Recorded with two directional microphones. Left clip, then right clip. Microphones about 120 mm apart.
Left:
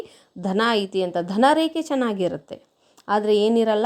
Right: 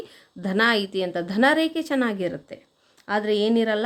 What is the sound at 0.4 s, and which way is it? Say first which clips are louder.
A woman's voice: even; 20° left (ahead or behind).